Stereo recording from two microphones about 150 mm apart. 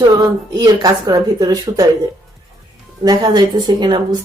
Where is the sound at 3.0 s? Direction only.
25° right (ahead or behind).